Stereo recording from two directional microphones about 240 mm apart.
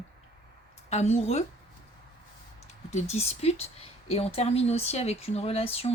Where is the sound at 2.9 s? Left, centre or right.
Left.